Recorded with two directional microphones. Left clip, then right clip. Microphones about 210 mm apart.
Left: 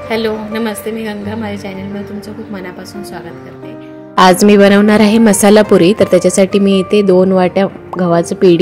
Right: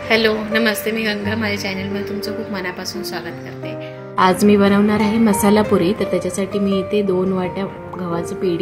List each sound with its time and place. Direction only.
0.1 s a woman's voice: 5° left (ahead or behind)
4.2 s a woman's voice: 40° left (ahead or behind)